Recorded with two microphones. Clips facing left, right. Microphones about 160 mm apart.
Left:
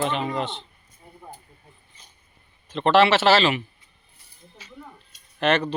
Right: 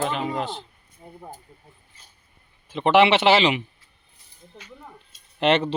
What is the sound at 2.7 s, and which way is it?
Speech, 15° right (ahead or behind).